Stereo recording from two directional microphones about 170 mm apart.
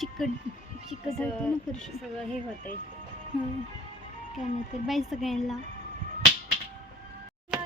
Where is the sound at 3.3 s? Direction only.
Centre (ahead or behind).